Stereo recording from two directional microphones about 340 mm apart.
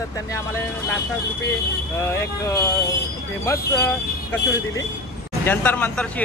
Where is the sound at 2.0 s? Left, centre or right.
Centre.